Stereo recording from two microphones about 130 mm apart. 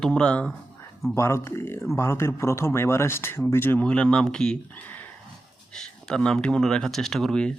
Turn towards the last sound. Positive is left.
turn(degrees=5)  # may be behind; listen again after turning